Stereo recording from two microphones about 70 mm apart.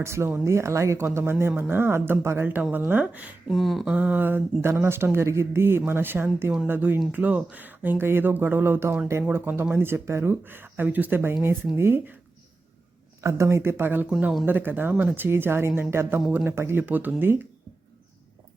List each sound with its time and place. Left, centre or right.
0.0 s speech: right
3.5 s speech: centre
3.9 s speech: right
11.4 s speech: right
13.2 s speech: right